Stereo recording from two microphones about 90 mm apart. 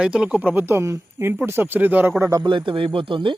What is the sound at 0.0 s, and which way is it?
Speech, 10° right (ahead or behind).